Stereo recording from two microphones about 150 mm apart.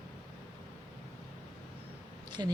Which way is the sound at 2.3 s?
30° right (ahead or behind).